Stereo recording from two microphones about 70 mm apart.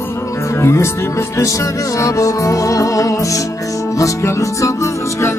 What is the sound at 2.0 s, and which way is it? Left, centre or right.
Music, left.